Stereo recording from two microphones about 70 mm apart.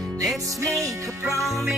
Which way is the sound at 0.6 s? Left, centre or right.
Right.